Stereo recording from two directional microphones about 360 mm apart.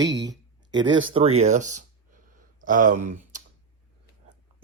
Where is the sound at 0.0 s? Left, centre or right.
Right.